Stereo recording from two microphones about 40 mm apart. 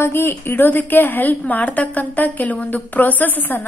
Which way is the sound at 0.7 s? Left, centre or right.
Left.